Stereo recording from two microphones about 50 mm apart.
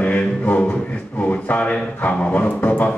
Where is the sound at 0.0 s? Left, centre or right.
Left.